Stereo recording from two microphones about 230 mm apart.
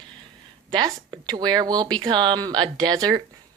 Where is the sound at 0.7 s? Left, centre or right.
Centre.